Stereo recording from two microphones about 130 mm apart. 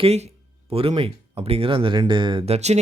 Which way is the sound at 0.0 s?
55° right (ahead or behind).